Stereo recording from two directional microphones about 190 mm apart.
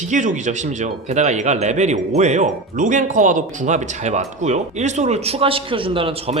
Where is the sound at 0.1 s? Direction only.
40° right (ahead or behind).